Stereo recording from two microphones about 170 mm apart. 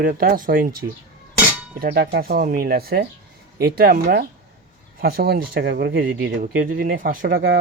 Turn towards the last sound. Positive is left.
turn(degrees=-65)  # may be behind; listen again after turning